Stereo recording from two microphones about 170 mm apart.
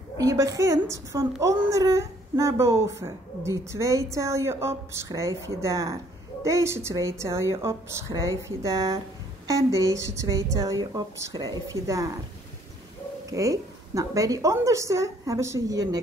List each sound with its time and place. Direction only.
0.2 s a woman's voice: 20° right (ahead or behind)
13.3 s a woman's voice: 20° right (ahead or behind)